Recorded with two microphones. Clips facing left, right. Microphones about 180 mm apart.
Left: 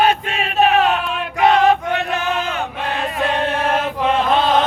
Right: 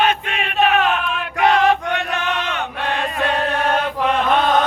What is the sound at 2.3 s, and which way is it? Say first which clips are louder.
Chant: left 2 dB; 30° left (ahead or behind).